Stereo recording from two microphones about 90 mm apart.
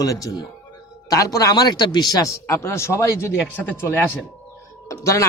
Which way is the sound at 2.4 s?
30° left (ahead or behind).